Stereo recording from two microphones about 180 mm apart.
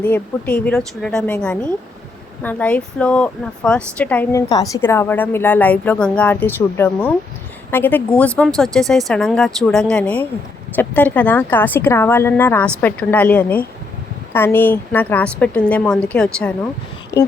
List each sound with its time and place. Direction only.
0.0 s a woman's voice: 10° left (ahead or behind)